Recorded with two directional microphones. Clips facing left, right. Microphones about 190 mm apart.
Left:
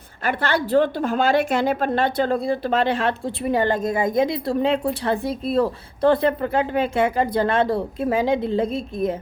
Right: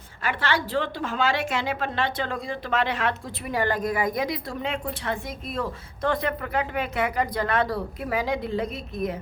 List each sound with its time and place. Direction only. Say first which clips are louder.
0.2 s a woman's voice: left 4 dB; 55° left (ahead or behind)
2.3 s a woman's voice: left 7 dB; 35° left (ahead or behind)